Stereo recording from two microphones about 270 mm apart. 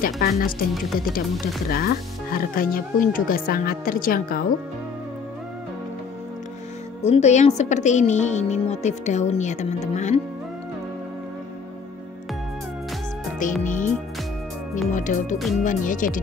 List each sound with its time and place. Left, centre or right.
0.0 s speech: left
1.7 s speech: left
7.0 s speech: left
13.4 s speech: left
14.9 s speech: left
15.3 s speech: centre
15.6 s speech: left